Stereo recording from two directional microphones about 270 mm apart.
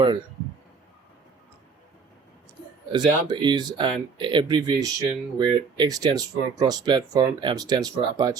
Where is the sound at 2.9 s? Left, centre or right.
Centre.